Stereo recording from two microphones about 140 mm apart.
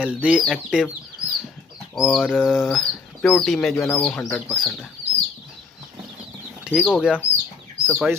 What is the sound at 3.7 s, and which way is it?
Speech, 20° left (ahead or behind).